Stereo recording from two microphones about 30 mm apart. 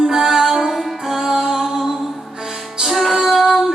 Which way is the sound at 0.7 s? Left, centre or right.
Centre.